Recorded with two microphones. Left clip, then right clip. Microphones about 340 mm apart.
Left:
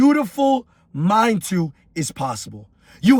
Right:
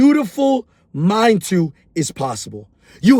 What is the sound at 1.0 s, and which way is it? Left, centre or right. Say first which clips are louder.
Speech: right 2 dB; centre.